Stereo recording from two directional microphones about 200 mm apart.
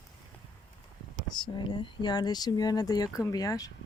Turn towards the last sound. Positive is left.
turn(degrees=20)  # may be behind; listen again after turning